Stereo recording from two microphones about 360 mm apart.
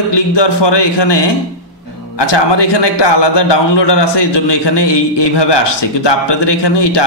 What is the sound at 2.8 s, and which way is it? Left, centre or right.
A man's voice, left.